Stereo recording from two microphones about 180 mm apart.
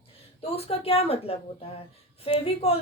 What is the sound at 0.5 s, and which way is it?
A woman's voice, 35° left (ahead or behind).